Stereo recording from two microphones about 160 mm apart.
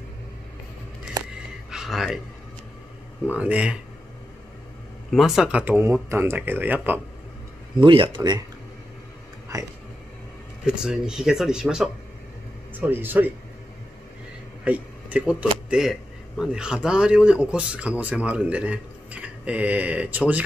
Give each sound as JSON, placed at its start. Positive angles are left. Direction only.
{"t": 1.7, "sound": "a sound", "side_deg": -5}
{"t": 3.3, "sound": "speech", "side_deg": -10}
{"t": 5.1, "sound": "speech", "side_deg": -5}
{"t": 7.7, "sound": "speech", "side_deg": -30}
{"t": 9.5, "sound": "speech", "side_deg": -20}
{"t": 10.6, "sound": "speech", "side_deg": -5}
{"t": 14.6, "sound": "speech", "side_deg": -10}